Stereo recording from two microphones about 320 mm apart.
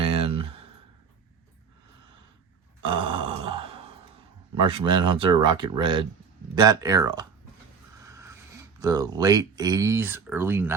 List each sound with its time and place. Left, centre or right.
0.0 s a sound: centre
2.8 s grunt: centre
4.5 s speech: centre